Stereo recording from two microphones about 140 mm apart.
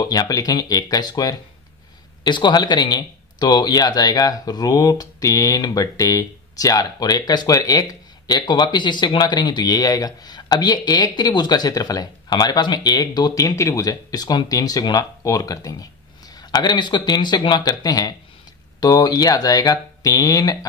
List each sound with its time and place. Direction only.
0.1 s speech: 25° left (ahead or behind)